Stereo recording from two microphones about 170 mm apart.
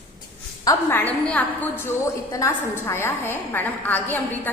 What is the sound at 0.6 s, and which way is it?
A woman's voice, 15° left (ahead or behind).